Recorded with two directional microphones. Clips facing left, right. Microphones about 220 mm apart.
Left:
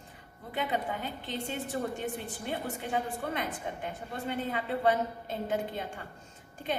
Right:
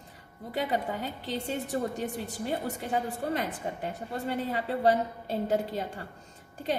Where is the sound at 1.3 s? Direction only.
40° right (ahead or behind).